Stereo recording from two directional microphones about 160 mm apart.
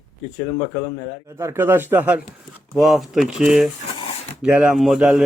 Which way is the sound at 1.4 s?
15° right (ahead or behind).